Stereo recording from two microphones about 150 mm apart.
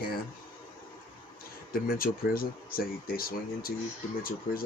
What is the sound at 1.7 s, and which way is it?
Speech, 75° left (ahead or behind).